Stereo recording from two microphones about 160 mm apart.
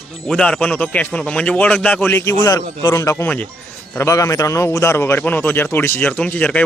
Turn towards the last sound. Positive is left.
turn(degrees=10)  # may be behind; listen again after turning